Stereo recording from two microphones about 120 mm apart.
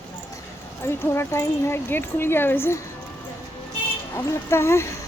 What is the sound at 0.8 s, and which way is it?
Speech, 20° left (ahead or behind).